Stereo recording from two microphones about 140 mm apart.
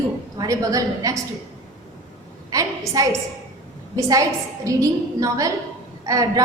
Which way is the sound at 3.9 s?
25° right (ahead or behind).